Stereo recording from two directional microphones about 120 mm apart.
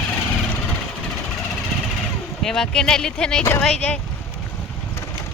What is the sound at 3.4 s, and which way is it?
Speech, 20° left (ahead or behind).